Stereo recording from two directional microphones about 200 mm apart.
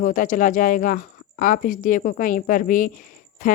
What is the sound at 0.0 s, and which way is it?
Speech, 40° left (ahead or behind).